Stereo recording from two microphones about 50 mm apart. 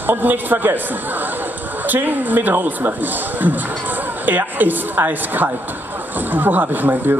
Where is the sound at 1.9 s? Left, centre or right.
Right.